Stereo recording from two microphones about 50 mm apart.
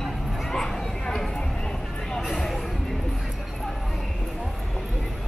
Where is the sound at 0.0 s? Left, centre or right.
Centre.